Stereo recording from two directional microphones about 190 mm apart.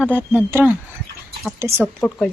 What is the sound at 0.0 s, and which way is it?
Speech, 10° left (ahead or behind).